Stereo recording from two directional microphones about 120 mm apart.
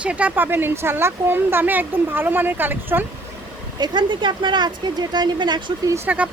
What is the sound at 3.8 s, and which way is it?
A woman's voice, 40° right (ahead or behind).